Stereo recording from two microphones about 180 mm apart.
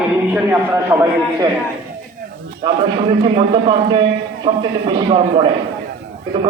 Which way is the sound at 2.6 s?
30° right (ahead or behind).